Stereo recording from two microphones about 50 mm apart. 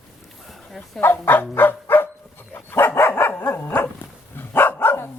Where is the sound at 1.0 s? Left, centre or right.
Left.